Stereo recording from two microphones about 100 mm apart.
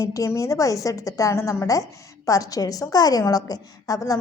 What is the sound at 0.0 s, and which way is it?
A woman's voice, 35° left (ahead or behind).